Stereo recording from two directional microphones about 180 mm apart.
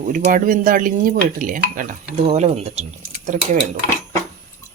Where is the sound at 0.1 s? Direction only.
45° right (ahead or behind).